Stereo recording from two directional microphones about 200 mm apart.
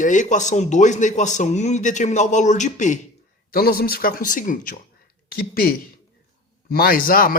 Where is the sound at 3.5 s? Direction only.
50° left (ahead or behind).